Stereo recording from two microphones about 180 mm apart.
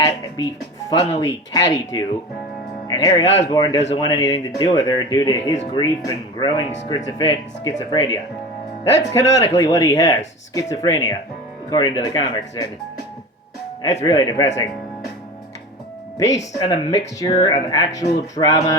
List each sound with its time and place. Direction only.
0.9 s speech: 20° left (ahead or behind)
14.0 s speech: 20° left (ahead or behind)
16.6 s speech: 25° left (ahead or behind)